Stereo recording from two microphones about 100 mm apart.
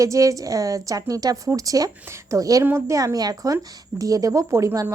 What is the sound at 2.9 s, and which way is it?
A woman's voice, 35° right (ahead or behind).